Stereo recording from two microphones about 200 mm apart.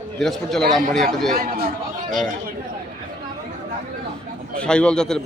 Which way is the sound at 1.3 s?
45° right (ahead or behind).